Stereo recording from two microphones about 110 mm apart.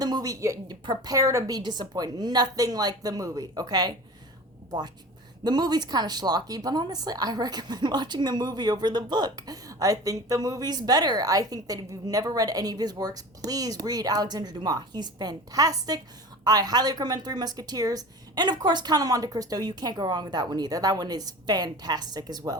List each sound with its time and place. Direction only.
0.0 s a woman's voice: 35° right (ahead or behind)
5.4 s a woman's voice: 40° right (ahead or behind)